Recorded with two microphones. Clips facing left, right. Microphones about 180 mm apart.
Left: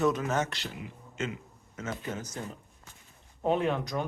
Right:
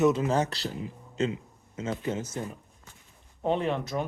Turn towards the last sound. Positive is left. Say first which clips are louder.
# right 1 dB
turn(degrees=-5)  # may be behind; listen again after turning